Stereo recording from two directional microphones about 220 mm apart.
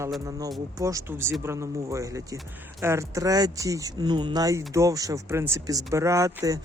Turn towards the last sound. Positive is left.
turn(degrees=-15)  # may be behind; listen again after turning